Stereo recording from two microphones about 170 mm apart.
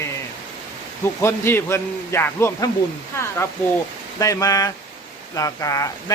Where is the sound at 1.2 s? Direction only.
15° left (ahead or behind).